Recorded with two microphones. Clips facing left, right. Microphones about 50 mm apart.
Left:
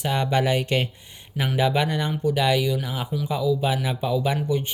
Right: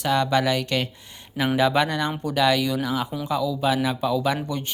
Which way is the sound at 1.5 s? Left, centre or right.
Centre.